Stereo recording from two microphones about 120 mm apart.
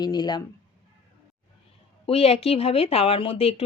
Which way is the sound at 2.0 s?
55° left (ahead or behind).